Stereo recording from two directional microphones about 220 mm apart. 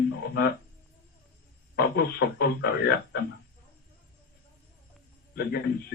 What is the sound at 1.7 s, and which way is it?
Speech, 45° left (ahead or behind).